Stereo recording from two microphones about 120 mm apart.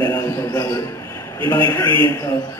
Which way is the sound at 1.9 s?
45° right (ahead or behind).